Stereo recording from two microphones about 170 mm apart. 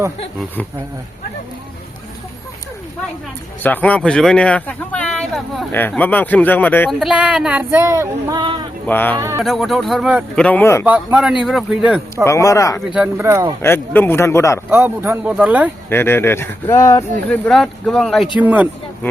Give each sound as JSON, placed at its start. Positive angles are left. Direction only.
{"t": 3.6, "sound": "speech", "side_deg": 10}
{"t": 7.0, "sound": "speech", "side_deg": -5}
{"t": 8.9, "sound": "speech", "side_deg": 10}
{"t": 9.1, "sound": "speech", "side_deg": -15}
{"t": 9.4, "sound": "speech", "side_deg": 0}
{"t": 10.3, "sound": "speech", "side_deg": 10}
{"t": 10.8, "sound": "speech", "side_deg": -10}
{"t": 12.1, "sound": "speech", "side_deg": 15}
{"t": 12.9, "sound": "speech", "side_deg": -5}
{"t": 13.2, "sound": "speech", "side_deg": -20}
{"t": 13.6, "sound": "speech", "side_deg": 10}
{"t": 14.7, "sound": "speech", "side_deg": -15}
{"t": 15.9, "sound": "speech", "side_deg": 15}
{"t": 18.3, "sound": "speech", "side_deg": -10}